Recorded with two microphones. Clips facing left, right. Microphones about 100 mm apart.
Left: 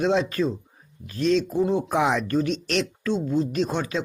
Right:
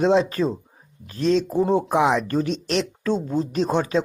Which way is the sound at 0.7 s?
30° right (ahead or behind).